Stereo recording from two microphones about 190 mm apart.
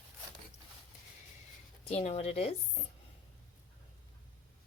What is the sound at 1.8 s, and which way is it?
Speech, 35° left (ahead or behind).